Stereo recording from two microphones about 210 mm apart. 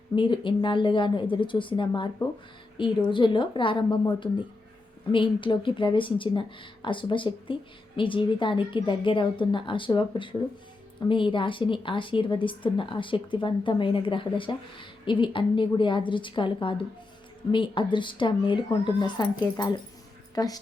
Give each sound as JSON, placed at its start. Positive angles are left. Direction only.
{"t": 0.2, "sound": "a woman's voice", "side_deg": 25}